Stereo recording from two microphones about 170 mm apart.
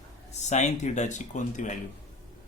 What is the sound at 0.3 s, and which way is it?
Speech, 40° left (ahead or behind).